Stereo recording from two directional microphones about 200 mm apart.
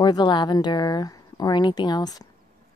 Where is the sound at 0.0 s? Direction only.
20° left (ahead or behind).